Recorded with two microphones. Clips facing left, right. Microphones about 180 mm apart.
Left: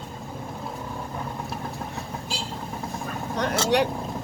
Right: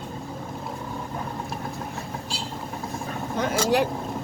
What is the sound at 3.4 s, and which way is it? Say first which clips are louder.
Speech: even; centre (ahead or behind).